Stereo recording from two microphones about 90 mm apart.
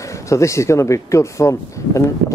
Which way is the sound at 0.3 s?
35° left (ahead or behind).